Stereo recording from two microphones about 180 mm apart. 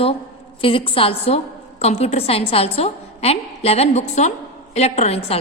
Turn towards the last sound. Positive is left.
turn(degrees=35)  # may be behind; listen again after turning